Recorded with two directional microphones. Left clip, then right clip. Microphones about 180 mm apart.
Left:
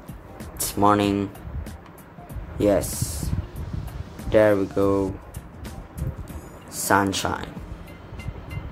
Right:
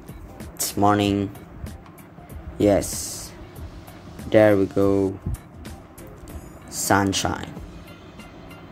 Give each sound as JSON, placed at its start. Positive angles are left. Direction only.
{"t": 0.6, "sound": "speech", "side_deg": -15}
{"t": 2.5, "sound": "speech", "side_deg": -15}
{"t": 6.7, "sound": "speech", "side_deg": -15}